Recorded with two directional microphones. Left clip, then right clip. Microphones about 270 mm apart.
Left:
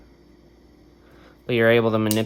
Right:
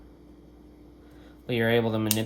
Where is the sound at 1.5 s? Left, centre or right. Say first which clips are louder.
Left 7 dB; left.